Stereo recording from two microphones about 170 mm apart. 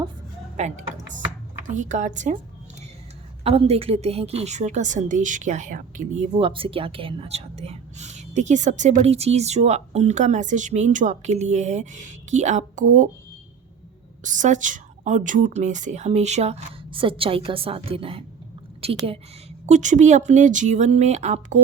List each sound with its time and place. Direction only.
0.5 s speech: 45° right (ahead or behind)
3.4 s speech: 35° right (ahead or behind)
6.3 s speech: 30° right (ahead or behind)
14.3 s a woman's voice: 45° right (ahead or behind)